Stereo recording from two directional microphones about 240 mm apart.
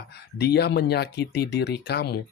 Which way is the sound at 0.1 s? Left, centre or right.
Left.